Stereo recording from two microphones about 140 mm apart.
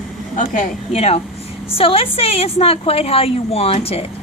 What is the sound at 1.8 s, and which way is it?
A woman's voice, 40° left (ahead or behind).